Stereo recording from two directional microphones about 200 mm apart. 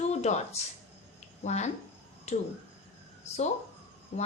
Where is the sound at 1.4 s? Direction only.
35° left (ahead or behind).